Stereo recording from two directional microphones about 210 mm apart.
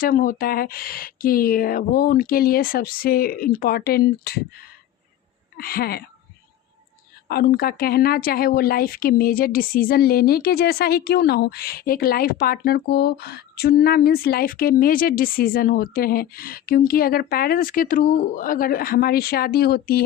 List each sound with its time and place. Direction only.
0.0 s speech: 40° left (ahead or behind)
5.5 s speech: 45° left (ahead or behind)
7.3 s speech: 45° left (ahead or behind)